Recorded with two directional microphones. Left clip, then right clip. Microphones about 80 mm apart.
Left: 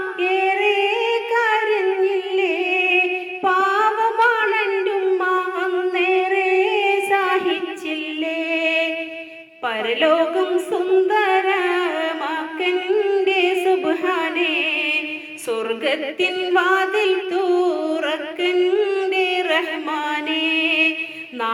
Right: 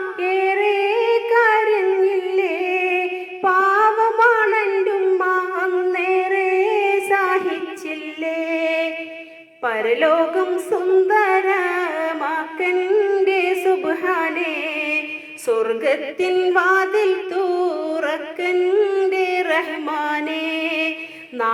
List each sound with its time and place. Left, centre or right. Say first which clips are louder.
0.2 s music: even; left
3.5 s humming: right 2 dB; centre
8.2 s music: right 1 dB; left
12.6 s a sound: right 2 dB; left
13.9 s a sound: even; centre
14.2 s music: left 1 dB; left
15.4 s a sound: right 3 dB; left
17.6 s music: left 1 dB; right
17.9 s music: even; left